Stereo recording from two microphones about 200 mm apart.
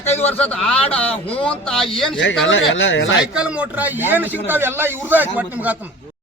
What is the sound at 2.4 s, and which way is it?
Speech, 70° left (ahead or behind).